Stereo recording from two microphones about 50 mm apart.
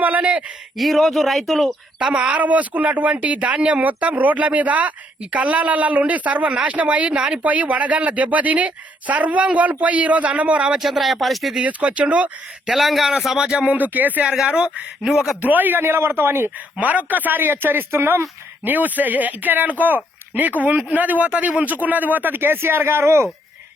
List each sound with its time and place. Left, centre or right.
0.0 s a sound: right
0.8 s speech: centre
2.0 s speech: right
10.7 s speech: centre
11.6 s speech: right
12.6 s speech: centre
13.7 s a man's voice: right
14.3 s speech: centre
15.4 s a man's voice: right
16.8 s a man's voice: right